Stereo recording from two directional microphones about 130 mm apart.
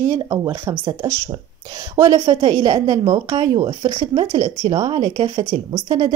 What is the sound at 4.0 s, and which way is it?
Speech, 50° right (ahead or behind).